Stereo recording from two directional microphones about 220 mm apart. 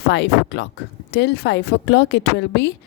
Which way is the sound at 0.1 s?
55° left (ahead or behind).